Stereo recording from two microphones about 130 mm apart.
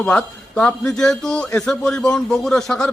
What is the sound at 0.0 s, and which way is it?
A man's voice, 10° left (ahead or behind).